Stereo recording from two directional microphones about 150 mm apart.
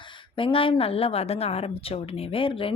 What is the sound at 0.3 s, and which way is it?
Speech, 35° left (ahead or behind).